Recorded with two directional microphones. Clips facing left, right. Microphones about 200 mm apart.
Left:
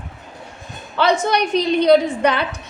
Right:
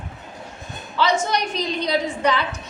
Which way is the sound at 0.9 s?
55° left (ahead or behind).